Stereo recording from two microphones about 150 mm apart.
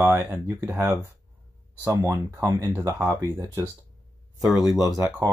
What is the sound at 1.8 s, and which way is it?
Speech, 20° right (ahead or behind).